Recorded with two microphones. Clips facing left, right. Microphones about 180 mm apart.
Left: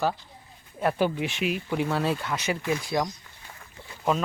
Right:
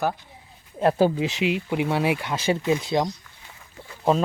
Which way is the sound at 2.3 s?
25° right (ahead or behind).